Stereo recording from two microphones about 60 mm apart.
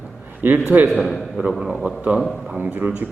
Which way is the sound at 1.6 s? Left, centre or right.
Centre.